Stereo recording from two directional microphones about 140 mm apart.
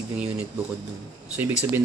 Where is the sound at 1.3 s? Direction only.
10° right (ahead or behind).